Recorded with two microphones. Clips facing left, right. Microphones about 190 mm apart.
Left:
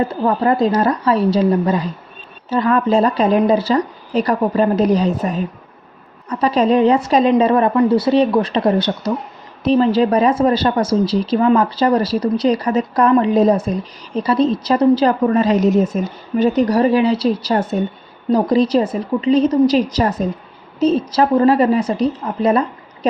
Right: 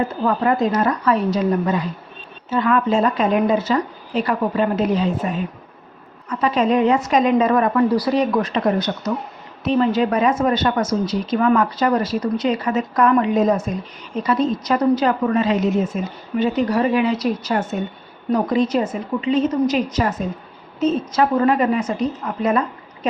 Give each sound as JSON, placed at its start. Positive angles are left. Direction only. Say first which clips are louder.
{"t": 0.0, "sound": "a woman's voice", "louder": "left 3 dB", "side_deg": 30}